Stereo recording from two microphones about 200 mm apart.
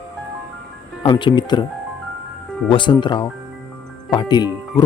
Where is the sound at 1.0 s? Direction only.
25° left (ahead or behind).